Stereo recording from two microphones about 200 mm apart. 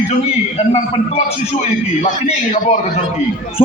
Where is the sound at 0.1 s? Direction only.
35° left (ahead or behind).